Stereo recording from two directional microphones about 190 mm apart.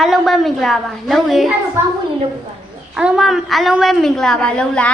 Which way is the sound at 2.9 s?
5° right (ahead or behind).